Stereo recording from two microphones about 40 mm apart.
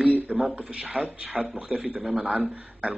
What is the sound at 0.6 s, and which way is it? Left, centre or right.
A man's voice, right.